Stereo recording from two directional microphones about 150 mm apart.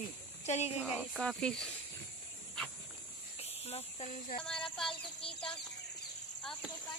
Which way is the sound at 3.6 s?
45° left (ahead or behind).